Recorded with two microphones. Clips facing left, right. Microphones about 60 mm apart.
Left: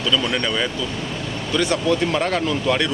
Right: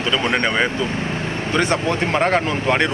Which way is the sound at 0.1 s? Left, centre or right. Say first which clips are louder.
Right 3 dB; right.